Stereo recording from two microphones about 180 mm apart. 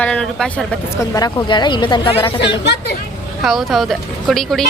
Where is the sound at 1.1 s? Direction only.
20° left (ahead or behind).